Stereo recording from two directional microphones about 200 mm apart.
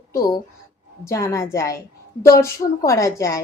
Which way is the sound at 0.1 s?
15° left (ahead or behind).